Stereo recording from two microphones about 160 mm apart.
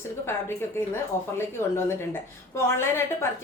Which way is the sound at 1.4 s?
15° left (ahead or behind).